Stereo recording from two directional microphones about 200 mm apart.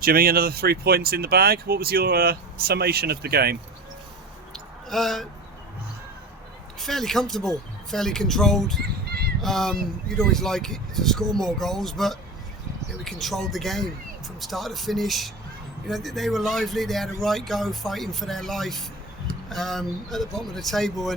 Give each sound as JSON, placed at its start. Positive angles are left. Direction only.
{"t": 0.0, "sound": "speech", "side_deg": -45}
{"t": 4.5, "sound": "a sound", "side_deg": 0}
{"t": 6.7, "sound": "speech", "side_deg": 0}
{"t": 9.0, "sound": "honk", "side_deg": -50}
{"t": 9.4, "sound": "speech", "side_deg": 0}